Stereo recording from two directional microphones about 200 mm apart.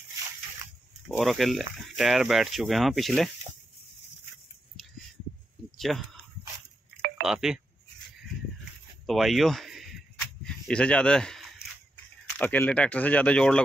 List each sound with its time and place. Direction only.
1.0 s speech: centre (ahead or behind)
5.8 s speech: centre (ahead or behind)
7.2 s speech: centre (ahead or behind)
9.0 s speech: centre (ahead or behind)
10.4 s a sound: 5° left (ahead or behind)
12.4 s speech: 10° left (ahead or behind)